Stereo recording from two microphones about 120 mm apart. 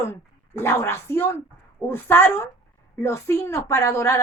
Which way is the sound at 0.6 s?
20° left (ahead or behind).